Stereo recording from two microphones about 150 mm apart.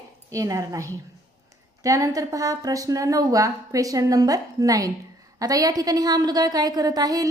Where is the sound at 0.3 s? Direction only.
20° right (ahead or behind).